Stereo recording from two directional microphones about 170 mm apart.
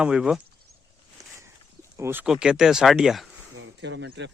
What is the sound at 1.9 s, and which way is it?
Speech, 15° right (ahead or behind).